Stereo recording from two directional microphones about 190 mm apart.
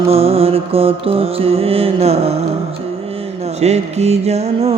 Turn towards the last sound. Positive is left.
turn(degrees=-35)  # may be behind; listen again after turning